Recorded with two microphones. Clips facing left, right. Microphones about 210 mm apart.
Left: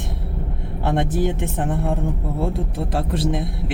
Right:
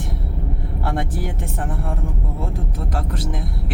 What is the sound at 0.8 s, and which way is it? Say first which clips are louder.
Speech: left 6 dB; 20° left (ahead or behind).